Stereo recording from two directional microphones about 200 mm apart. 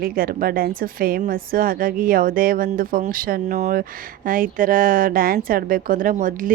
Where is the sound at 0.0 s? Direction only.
45° right (ahead or behind).